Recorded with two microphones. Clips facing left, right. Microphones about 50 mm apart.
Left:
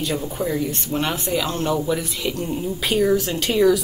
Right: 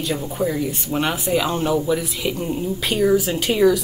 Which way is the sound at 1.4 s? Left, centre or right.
Centre.